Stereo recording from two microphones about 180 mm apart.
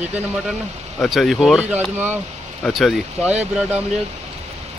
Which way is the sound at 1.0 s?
Centre (ahead or behind).